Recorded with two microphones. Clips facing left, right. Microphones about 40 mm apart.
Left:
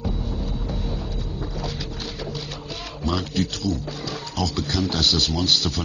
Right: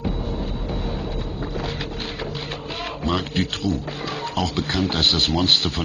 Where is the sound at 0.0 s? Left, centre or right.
Right.